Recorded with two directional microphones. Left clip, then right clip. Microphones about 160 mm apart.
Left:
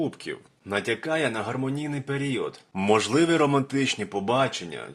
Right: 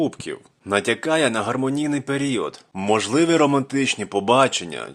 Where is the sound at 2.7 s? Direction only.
15° right (ahead or behind).